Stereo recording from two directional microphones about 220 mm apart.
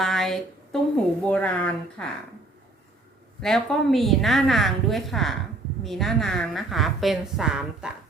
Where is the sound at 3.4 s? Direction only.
Centre (ahead or behind).